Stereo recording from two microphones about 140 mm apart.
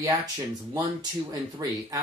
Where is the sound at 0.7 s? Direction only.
25° right (ahead or behind).